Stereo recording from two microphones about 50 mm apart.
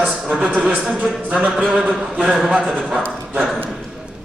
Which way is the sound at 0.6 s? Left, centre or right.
Right.